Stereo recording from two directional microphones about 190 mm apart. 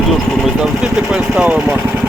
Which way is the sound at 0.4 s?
5° right (ahead or behind).